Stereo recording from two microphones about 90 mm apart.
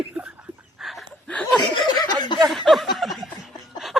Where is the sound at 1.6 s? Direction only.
60° left (ahead or behind).